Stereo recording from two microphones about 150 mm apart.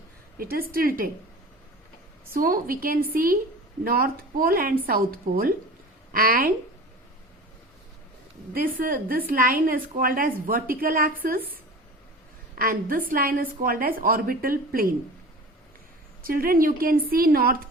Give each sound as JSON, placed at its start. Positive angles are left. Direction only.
{"t": 0.3, "sound": "a woman's voice", "side_deg": -75}
{"t": 2.3, "sound": "a woman's voice", "side_deg": -70}
{"t": 8.5, "sound": "a woman's voice", "side_deg": -70}
{"t": 12.5, "sound": "a woman's voice", "side_deg": -70}
{"t": 16.2, "sound": "a woman's voice", "side_deg": -75}